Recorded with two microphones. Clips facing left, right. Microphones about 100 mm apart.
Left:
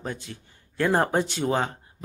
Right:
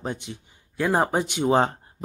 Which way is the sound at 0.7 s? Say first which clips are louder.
Even; 5° right (ahead or behind).